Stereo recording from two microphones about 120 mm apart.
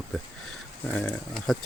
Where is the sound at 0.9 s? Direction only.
5° left (ahead or behind).